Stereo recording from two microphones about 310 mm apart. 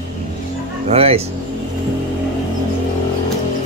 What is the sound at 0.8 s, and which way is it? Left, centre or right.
Speech, centre.